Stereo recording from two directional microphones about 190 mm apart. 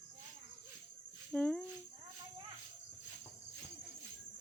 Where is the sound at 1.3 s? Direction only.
5° left (ahead or behind).